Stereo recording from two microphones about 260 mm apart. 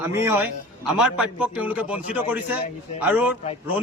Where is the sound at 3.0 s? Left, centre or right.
Centre.